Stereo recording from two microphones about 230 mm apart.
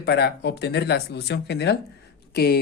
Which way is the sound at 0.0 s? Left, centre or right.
Left.